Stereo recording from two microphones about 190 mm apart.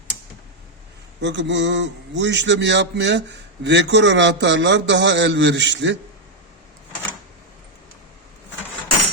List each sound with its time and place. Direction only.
1.2 s a man's voice: 70° right (ahead or behind)